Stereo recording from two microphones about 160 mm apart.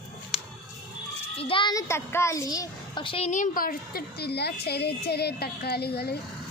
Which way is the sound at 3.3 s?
60° left (ahead or behind).